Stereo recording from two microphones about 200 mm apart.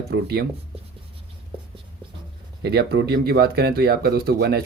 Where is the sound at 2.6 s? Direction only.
55° right (ahead or behind).